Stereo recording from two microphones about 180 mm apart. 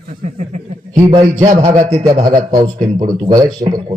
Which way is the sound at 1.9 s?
35° right (ahead or behind).